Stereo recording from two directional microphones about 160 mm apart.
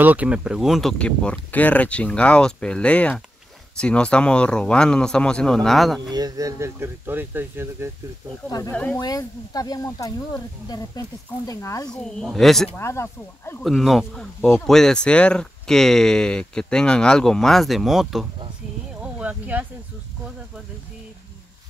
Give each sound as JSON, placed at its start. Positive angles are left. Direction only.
{"t": 0.0, "sound": "speech", "side_deg": -10}
{"t": 6.0, "sound": "speech", "side_deg": -25}
{"t": 8.5, "sound": "speech", "side_deg": 20}
{"t": 8.7, "sound": "speech", "side_deg": 10}
{"t": 9.0, "sound": "speech", "side_deg": 25}
{"t": 11.9, "sound": "speech", "side_deg": 5}
{"t": 12.7, "sound": "speech", "side_deg": 15}
{"t": 13.7, "sound": "speech", "side_deg": 0}
{"t": 18.9, "sound": "a sound", "side_deg": -5}